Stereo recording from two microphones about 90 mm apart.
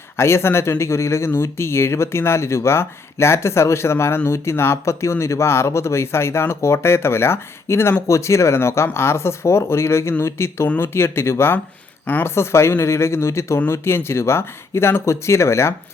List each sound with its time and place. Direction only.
0.2 s speech: 30° left (ahead or behind)